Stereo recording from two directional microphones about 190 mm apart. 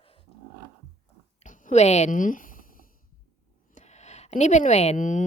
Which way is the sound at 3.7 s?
35° left (ahead or behind).